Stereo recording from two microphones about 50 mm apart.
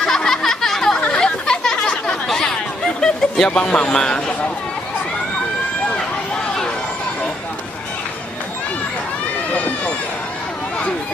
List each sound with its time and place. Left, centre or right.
0.0 s a sound: centre
1.1 s chatter: centre
3.4 s speech: left
9.5 s run: left